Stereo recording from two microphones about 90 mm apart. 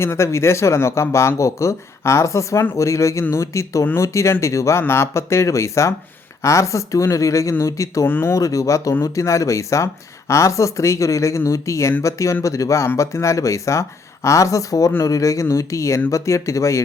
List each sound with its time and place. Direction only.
0.0 s speech: 30° left (ahead or behind)
8.0 s speech: 25° left (ahead or behind)